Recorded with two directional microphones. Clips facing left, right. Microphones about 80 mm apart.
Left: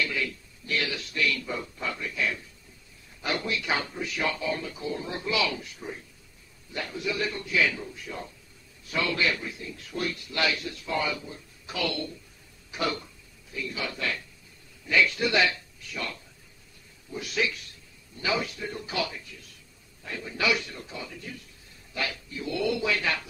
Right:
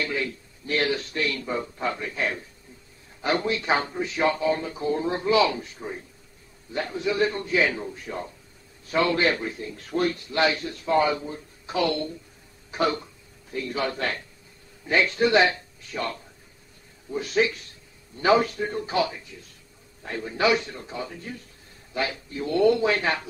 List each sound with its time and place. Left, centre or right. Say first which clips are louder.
0.0 s speech: right 2 dB; right
6.7 s speech: right 5 dB; right
10.2 s speech: right 5 dB; right
13.5 s a man's voice: right 6 dB; right
22.3 s speech: right 9 dB; right